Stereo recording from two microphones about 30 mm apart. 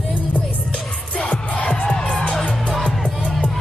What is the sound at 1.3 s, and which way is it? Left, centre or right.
Music, left.